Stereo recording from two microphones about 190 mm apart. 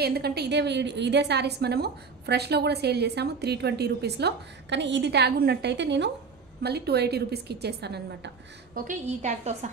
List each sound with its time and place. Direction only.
0.0 s a woman's voice: 55° right (ahead or behind)
8.7 s a woman's voice: 40° right (ahead or behind)